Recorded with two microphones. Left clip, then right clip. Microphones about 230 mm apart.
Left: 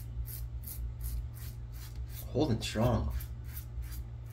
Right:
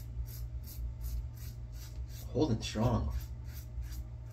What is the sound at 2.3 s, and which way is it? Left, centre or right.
Speech, left.